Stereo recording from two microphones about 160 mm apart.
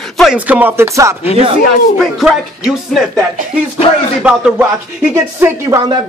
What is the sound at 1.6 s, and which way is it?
Speech, centre (ahead or behind).